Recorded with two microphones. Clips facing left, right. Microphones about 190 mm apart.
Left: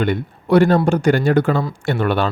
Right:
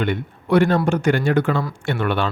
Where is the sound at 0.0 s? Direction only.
35° left (ahead or behind).